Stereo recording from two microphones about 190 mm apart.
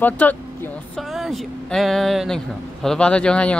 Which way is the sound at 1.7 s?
Centre (ahead or behind).